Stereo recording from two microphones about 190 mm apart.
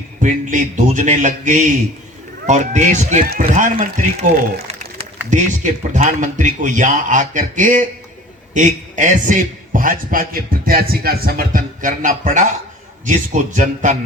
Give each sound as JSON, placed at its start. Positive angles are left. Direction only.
{"t": 0.2, "sound": "a man's voice", "side_deg": -40}